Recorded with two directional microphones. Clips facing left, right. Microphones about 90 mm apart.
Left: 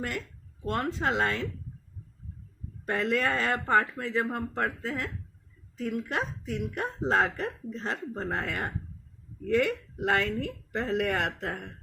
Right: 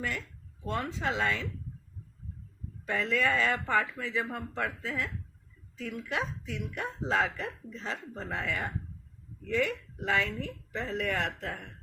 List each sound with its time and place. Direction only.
0.7 s speech: 55° left (ahead or behind)
2.8 s a woman's voice: 55° left (ahead or behind)